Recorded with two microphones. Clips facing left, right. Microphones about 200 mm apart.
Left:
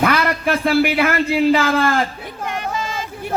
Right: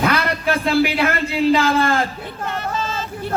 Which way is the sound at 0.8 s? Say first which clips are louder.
Left 1 dB; 55° left (ahead or behind).